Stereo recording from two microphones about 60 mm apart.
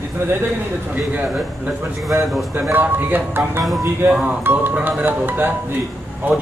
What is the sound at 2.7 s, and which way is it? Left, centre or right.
Speech, right.